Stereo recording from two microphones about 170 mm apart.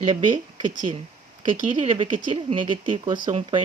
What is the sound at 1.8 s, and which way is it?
Speech, 35° right (ahead or behind).